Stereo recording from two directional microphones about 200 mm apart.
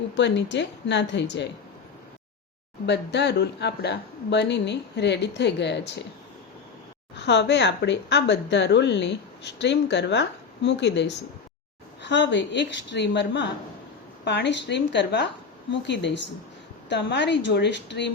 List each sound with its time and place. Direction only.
0.1 s a woman's voice: 60° left (ahead or behind)
2.8 s a woman's voice: 60° left (ahead or behind)
7.2 s a woman's voice: 60° left (ahead or behind)